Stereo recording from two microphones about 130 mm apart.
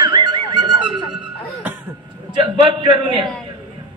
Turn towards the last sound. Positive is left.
turn(degrees=-40)  # may be behind; listen again after turning